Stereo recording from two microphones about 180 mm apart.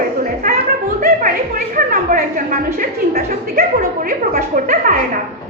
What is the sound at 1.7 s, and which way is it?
A woman's voice, 50° right (ahead or behind).